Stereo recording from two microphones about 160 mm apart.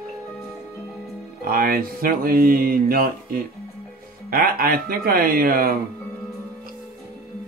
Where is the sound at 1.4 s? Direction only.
65° right (ahead or behind).